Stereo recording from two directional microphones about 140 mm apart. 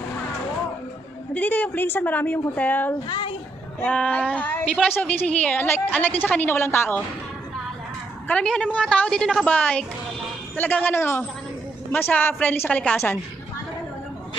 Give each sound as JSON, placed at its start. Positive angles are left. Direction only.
{"t": 1.3, "sound": "a woman's voice", "side_deg": 10}
{"t": 3.1, "sound": "a child's voice", "side_deg": 35}
{"t": 3.8, "sound": "a woman's voice", "side_deg": 10}
{"t": 8.3, "sound": "a woman's voice", "side_deg": 5}